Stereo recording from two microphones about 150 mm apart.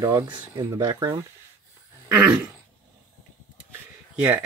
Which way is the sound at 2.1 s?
10° right (ahead or behind).